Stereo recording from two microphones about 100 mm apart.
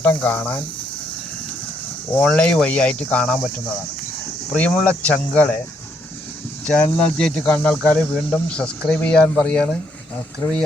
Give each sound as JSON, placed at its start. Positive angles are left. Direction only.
{"t": 0.0, "sound": "speech", "side_deg": 15}
{"t": 2.2, "sound": "speech", "side_deg": 10}
{"t": 4.5, "sound": "speech", "side_deg": 15}
{"t": 6.7, "sound": "speech", "side_deg": 15}